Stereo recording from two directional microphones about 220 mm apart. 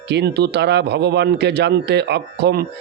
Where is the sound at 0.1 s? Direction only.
50° right (ahead or behind).